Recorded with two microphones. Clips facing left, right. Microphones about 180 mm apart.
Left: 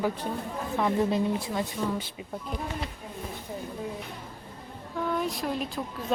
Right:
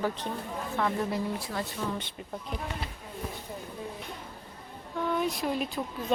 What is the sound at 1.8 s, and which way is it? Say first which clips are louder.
Speech: left 3 dB; 5° left (ahead or behind).